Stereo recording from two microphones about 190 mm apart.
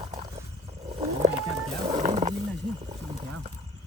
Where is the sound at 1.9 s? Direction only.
35° right (ahead or behind).